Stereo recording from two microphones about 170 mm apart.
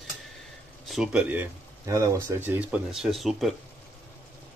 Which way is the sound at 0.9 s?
5° right (ahead or behind).